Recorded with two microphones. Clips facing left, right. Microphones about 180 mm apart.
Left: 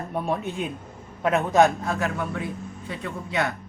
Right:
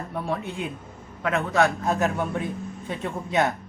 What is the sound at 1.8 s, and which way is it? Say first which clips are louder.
Speech: right 3 dB; 25° right (ahead or behind).